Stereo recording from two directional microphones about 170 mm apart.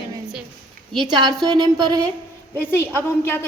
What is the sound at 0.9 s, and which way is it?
Speech, 25° right (ahead or behind).